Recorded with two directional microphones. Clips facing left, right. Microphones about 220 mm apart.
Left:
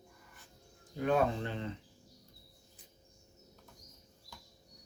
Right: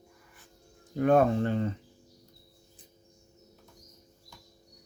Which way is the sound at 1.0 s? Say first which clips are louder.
Right 8 dB; 50° right (ahead or behind).